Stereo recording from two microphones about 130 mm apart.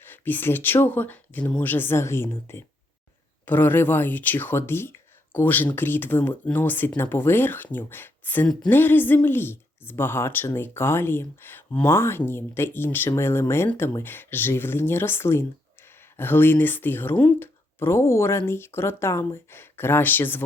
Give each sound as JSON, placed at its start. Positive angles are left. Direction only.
{"t": 0.0, "sound": "a woman's voice", "side_deg": 15}